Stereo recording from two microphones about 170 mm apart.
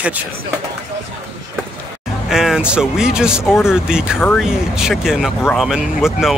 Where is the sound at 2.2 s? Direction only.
5° right (ahead or behind).